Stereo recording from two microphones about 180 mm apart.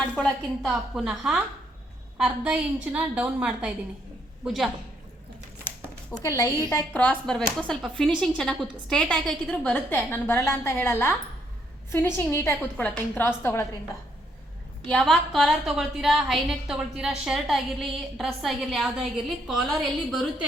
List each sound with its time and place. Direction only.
0.2 s a woman's voice: centre (ahead or behind)
6.2 s a woman's voice: 20° left (ahead or behind)
7.0 s a woman's voice: 5° left (ahead or behind)
14.8 s a woman's voice: 5° left (ahead or behind)